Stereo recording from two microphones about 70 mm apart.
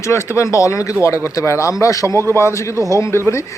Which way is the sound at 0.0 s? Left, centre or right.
Left.